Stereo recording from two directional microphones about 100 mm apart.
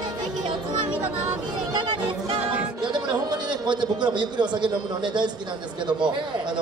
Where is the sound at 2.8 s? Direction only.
50° right (ahead or behind).